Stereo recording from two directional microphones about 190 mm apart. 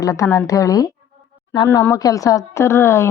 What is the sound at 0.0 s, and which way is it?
A woman's voice, 20° left (ahead or behind).